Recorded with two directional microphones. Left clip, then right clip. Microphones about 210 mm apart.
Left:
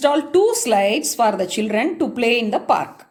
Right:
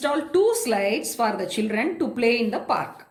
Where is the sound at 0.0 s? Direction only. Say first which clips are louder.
Left 5 dB; 40° left (ahead or behind).